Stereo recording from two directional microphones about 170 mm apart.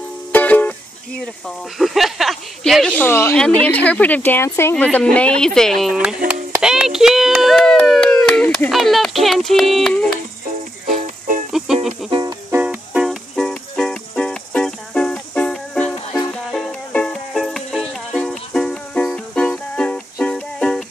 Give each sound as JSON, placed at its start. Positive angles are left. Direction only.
{"t": 0.3, "sound": "music", "side_deg": 10}
{"t": 1.8, "sound": "speech", "side_deg": 0}
{"t": 10.9, "sound": "music", "side_deg": -50}
{"t": 11.5, "sound": "music", "side_deg": -5}
{"t": 12.1, "sound": "music", "side_deg": -25}
{"t": 12.5, "sound": "music", "side_deg": -5}